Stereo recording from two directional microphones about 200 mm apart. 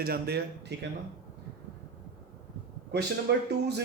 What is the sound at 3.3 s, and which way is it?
Speech, 55° right (ahead or behind).